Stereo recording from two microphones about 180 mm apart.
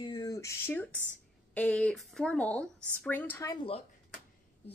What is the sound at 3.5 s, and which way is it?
Speech, 30° left (ahead or behind).